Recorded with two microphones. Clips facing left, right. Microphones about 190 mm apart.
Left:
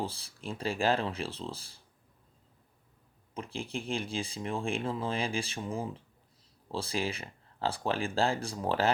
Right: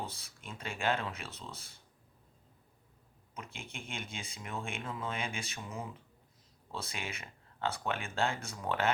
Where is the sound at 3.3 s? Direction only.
30° left (ahead or behind).